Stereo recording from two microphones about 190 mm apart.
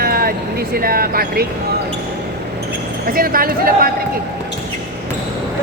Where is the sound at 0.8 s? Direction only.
50° right (ahead or behind).